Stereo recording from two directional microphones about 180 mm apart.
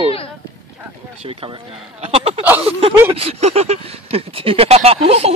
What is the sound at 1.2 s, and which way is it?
Speech, 30° right (ahead or behind).